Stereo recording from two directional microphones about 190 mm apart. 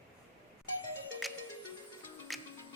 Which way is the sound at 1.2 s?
Centre (ahead or behind).